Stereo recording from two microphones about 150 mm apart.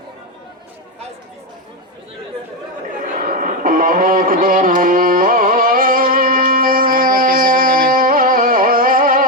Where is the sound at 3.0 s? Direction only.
70° right (ahead or behind).